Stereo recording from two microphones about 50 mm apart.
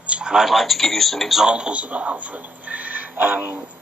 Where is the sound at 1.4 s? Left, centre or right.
Centre; by 3.7 s right.